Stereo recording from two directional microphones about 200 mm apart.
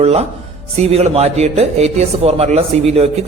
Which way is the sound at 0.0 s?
30° right (ahead or behind).